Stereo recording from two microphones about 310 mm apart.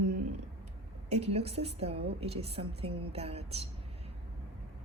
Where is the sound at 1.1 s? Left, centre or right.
Centre.